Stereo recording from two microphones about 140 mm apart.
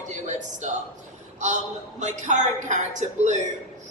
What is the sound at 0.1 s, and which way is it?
Speech, 60° right (ahead or behind).